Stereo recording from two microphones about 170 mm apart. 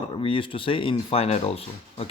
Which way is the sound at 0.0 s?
30° left (ahead or behind).